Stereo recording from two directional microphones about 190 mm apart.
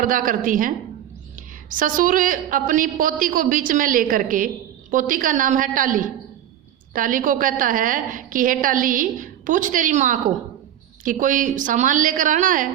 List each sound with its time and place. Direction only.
0.0 s a woman's voice: 45° right (ahead or behind)
1.7 s a woman's voice: 45° right (ahead or behind)